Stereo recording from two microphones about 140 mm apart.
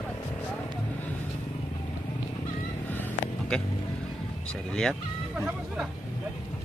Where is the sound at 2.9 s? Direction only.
15° left (ahead or behind).